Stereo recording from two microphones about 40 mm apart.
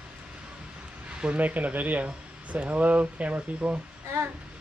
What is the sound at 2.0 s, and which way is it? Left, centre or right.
Speech, right.